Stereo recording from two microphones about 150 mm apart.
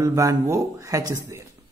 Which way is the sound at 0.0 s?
20° right (ahead or behind).